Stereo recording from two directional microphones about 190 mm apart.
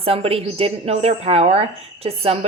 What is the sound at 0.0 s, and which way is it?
Speech, 30° right (ahead or behind).